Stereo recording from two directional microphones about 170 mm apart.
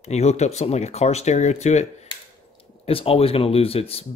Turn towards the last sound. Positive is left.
turn(degrees=35)  # may be behind; listen again after turning